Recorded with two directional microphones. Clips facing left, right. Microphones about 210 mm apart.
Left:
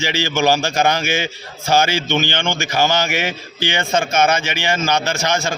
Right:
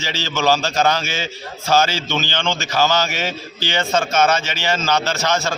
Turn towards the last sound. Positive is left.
turn(degrees=10)  # may be behind; listen again after turning